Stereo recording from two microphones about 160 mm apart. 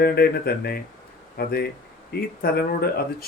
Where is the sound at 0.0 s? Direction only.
75° left (ahead or behind).